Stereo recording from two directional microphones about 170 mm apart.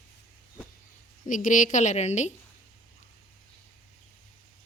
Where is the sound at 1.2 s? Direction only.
50° left (ahead or behind).